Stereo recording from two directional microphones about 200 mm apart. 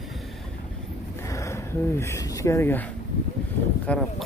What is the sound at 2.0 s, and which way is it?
Speech, 15° left (ahead or behind).